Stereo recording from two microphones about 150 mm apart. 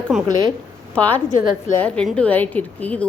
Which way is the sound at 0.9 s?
10° left (ahead or behind).